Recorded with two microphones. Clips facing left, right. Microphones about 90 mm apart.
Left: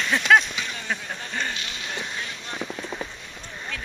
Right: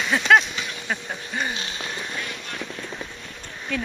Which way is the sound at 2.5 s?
15° left (ahead or behind).